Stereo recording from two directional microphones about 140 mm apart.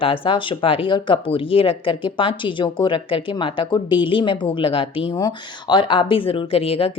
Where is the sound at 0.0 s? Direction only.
40° left (ahead or behind).